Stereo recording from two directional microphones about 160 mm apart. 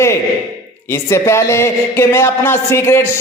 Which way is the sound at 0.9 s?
15° left (ahead or behind).